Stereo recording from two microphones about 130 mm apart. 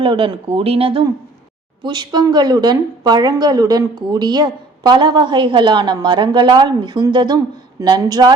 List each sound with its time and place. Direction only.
0.0 s a woman's voice: 40° right (ahead or behind)